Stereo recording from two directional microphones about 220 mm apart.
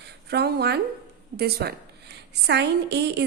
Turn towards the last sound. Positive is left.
turn(degrees=-50)  # may be behind; listen again after turning